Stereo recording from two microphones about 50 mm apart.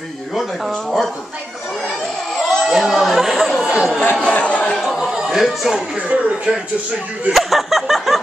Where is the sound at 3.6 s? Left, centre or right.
Centre.